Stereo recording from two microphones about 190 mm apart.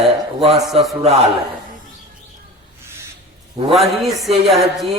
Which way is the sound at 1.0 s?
35° right (ahead or behind).